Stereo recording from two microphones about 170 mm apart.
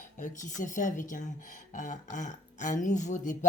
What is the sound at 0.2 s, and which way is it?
Speech, 50° left (ahead or behind).